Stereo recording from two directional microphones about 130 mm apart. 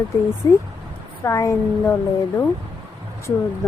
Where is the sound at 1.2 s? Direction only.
20° left (ahead or behind).